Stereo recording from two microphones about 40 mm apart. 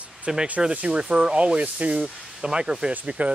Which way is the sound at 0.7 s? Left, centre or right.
Right.